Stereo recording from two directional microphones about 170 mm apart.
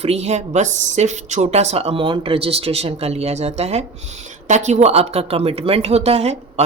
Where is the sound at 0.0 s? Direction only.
40° right (ahead or behind).